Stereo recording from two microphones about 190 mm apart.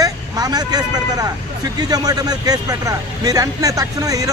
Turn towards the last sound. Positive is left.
turn(degrees=-20)  # may be behind; listen again after turning